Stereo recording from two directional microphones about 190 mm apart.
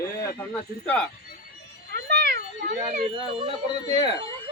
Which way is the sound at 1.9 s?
60° right (ahead or behind).